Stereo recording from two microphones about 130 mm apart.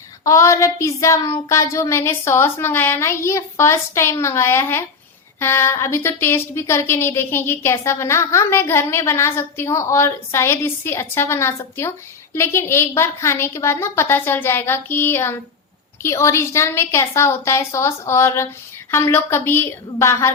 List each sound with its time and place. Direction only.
0.3 s a woman's voice: 25° left (ahead or behind)